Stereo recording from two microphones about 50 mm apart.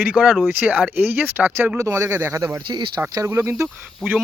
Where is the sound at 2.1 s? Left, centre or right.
Right.